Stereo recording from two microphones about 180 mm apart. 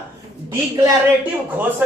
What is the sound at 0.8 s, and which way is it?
Speech, 10° right (ahead or behind).